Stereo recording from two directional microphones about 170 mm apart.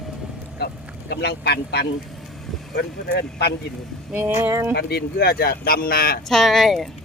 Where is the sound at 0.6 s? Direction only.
70° left (ahead or behind).